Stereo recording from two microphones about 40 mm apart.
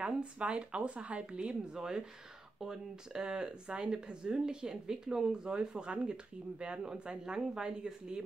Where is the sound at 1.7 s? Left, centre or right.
Centre.